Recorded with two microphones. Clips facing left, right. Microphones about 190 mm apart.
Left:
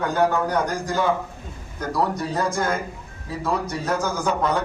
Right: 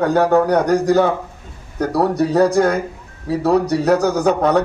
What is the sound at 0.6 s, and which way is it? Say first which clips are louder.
Speech: right 9 dB; 65° right (ahead or behind).